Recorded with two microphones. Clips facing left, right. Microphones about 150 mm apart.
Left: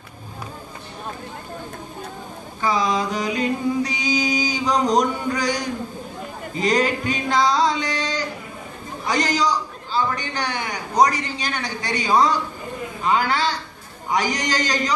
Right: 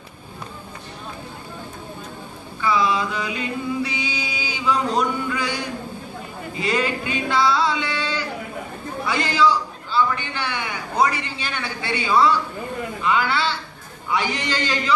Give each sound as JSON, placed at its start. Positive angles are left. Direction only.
{"t": 2.6, "sound": "mantra", "side_deg": 40}
{"t": 6.6, "sound": "a sound", "side_deg": 40}
{"t": 9.0, "sound": "a man's voice", "side_deg": 40}
{"t": 13.0, "sound": "mantra", "side_deg": 40}